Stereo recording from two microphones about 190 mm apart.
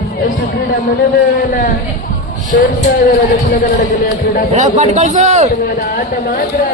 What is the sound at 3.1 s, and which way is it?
Speech, 45° left (ahead or behind).